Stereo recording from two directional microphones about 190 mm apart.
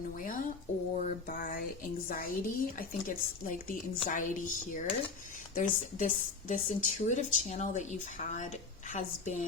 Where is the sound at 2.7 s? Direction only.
45° left (ahead or behind).